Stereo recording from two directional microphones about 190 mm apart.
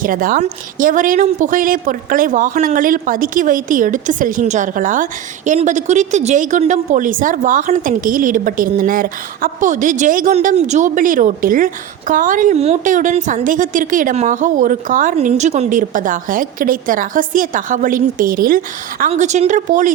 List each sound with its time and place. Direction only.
0.0 s a woman's voice: 45° right (ahead or behind)